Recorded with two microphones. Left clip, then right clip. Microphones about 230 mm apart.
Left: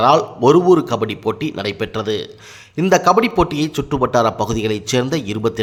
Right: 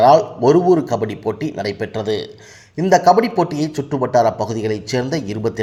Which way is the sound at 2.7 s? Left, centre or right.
Centre.